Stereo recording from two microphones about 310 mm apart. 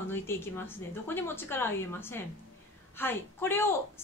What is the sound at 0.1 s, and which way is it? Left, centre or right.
A woman's voice, centre.